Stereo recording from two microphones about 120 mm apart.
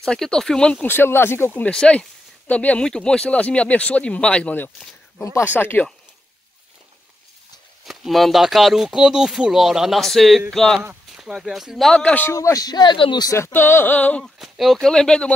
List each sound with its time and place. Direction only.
0.0 s speech: 5° left (ahead or behind)
0.8 s speech: 20° left (ahead or behind)
7.8 s speech: centre (ahead or behind)
10.8 s speech: 10° right (ahead or behind); by 12.4 s 15° left (ahead or behind)
12.4 s speech: 30° left (ahead or behind)
13.3 s speech: 20° left (ahead or behind)
14.4 s speech: centre (ahead or behind)